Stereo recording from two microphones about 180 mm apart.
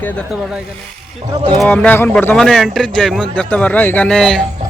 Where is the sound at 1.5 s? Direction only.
10° left (ahead or behind).